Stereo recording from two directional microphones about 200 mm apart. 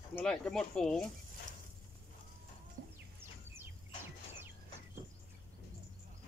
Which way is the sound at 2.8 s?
45° right (ahead or behind).